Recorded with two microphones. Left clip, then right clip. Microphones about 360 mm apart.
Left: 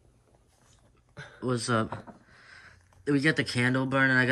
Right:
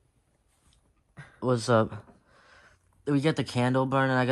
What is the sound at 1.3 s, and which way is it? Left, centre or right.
Speech, centre.